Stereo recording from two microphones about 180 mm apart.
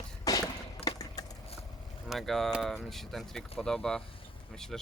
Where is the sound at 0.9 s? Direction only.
20° left (ahead or behind).